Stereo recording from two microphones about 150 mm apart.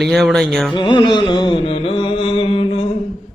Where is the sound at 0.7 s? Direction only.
30° left (ahead or behind).